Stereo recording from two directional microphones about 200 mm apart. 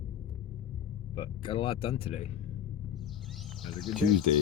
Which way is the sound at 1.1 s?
25° left (ahead or behind).